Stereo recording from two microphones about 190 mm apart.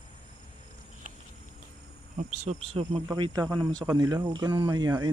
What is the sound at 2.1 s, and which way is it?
Speech, 35° right (ahead or behind).